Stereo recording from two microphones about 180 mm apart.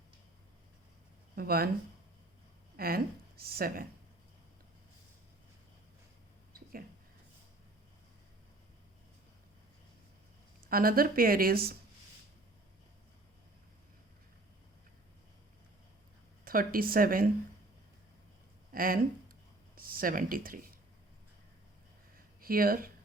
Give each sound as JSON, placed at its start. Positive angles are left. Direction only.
{"t": 1.4, "sound": "speech", "side_deg": -55}
{"t": 2.7, "sound": "speech", "side_deg": -55}
{"t": 10.7, "sound": "speech", "side_deg": -55}
{"t": 16.4, "sound": "speech", "side_deg": -50}
{"t": 18.7, "sound": "speech", "side_deg": -50}
{"t": 22.4, "sound": "speech", "side_deg": -55}